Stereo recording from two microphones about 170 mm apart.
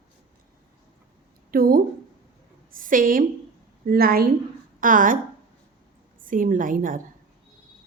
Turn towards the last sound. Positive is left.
turn(degrees=-55)  # may be behind; listen again after turning